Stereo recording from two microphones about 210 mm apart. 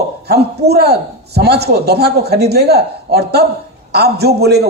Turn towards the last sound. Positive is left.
turn(degrees=-50)  # may be behind; listen again after turning